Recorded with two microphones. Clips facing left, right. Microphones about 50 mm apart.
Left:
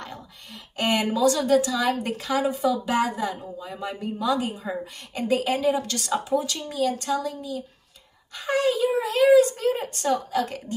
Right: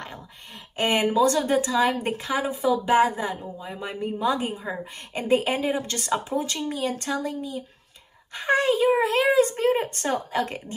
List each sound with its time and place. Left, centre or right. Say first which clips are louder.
0.7 s a woman's voice: right 2 dB; right